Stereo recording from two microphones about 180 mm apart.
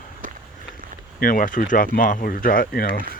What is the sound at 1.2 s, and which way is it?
Speech, 50° left (ahead or behind).